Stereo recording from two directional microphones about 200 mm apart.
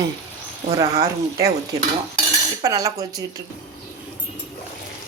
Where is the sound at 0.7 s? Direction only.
30° right (ahead or behind).